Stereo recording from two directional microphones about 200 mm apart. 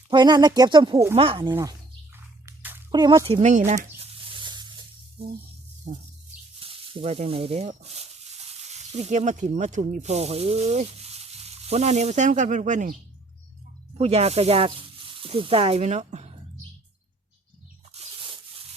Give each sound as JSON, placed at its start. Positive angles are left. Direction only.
{"t": 0.1, "sound": "speech", "side_deg": -20}
{"t": 2.1, "sound": "a sound", "side_deg": -10}
{"t": 2.9, "sound": "speech", "side_deg": -20}
{"t": 3.4, "sound": "speech", "side_deg": -35}
{"t": 4.0, "sound": "zipper", "side_deg": -25}
{"t": 5.9, "sound": "speech", "side_deg": -40}
{"t": 6.6, "sound": "speech", "side_deg": -25}
{"t": 14.0, "sound": "speech", "side_deg": -30}
{"t": 17.9, "sound": "rub", "side_deg": -30}